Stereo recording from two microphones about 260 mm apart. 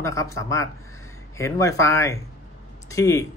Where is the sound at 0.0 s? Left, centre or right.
Centre.